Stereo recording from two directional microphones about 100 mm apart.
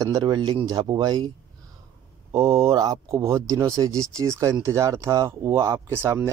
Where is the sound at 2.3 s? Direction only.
30° right (ahead or behind).